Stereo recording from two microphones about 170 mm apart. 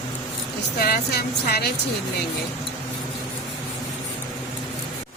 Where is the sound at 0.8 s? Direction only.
65° left (ahead or behind).